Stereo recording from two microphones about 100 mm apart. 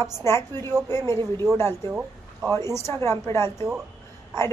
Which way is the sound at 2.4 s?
40° right (ahead or behind).